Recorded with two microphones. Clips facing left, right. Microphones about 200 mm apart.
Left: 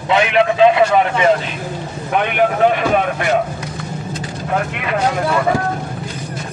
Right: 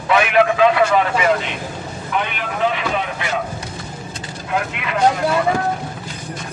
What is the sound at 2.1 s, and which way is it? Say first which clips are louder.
Speech: left 8 dB; 55° left (ahead or behind).